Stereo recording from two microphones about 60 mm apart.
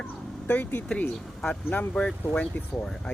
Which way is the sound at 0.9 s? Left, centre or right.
Centre.